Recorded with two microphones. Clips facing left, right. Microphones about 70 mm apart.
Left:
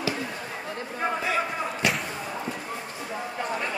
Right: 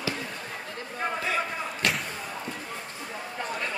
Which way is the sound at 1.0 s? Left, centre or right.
Centre.